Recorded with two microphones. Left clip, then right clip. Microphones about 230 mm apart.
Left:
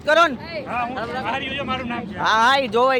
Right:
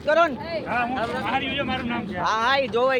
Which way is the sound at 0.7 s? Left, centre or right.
Centre.